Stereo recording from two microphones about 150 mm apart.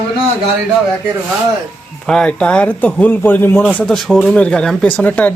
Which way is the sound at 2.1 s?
5° left (ahead or behind).